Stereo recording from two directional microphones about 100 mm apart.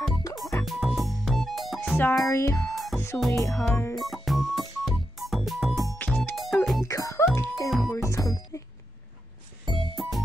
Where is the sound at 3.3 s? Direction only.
30° left (ahead or behind).